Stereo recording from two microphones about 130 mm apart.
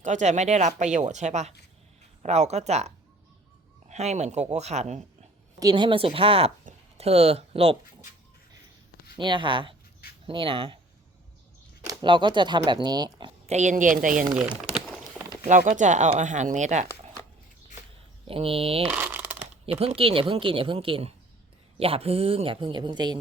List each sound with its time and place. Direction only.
0.0 s speech: 65° right (ahead or behind)
5.5 s speech: 35° right (ahead or behind)
9.1 s speech: 40° right (ahead or behind)
11.9 s speech: 35° right (ahead or behind)
13.5 s speech: 65° right (ahead or behind); by 14.3 s 90° right
14.6 s a sound: centre (ahead or behind)
15.4 s speech: 75° right (ahead or behind)
18.3 s speech: 45° right (ahead or behind)
18.9 s crumpling: 10° right (ahead or behind)
19.6 s speech: 50° right (ahead or behind)